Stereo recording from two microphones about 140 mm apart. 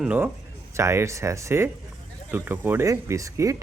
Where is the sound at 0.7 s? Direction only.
20° right (ahead or behind).